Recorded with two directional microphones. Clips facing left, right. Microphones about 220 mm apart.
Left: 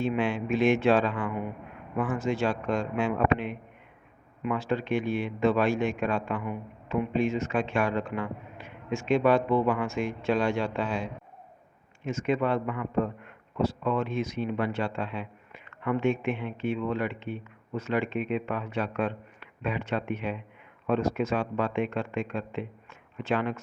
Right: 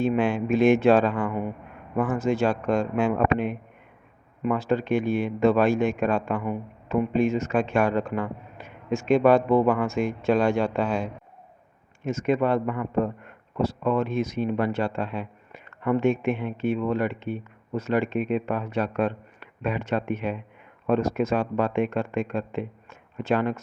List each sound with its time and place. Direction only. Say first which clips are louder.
0.0 s a man's voice: right 5 dB; 45° right (ahead or behind)